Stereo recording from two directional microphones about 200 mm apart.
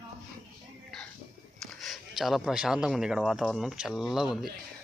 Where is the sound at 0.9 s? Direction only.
Centre (ahead or behind).